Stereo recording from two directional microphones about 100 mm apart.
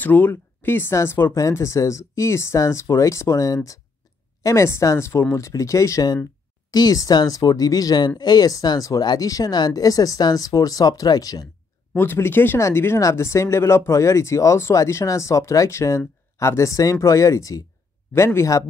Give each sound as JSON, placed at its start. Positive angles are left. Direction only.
{"t": 0.0, "sound": "speech", "side_deg": 20}
{"t": 11.9, "sound": "speech", "side_deg": 20}